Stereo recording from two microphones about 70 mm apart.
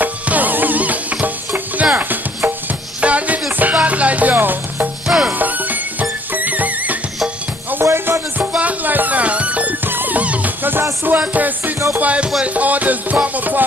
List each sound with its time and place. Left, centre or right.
0.0 s music: right
5.0 s music: centre
5.4 s music: right
7.8 s music: right
8.5 s music: right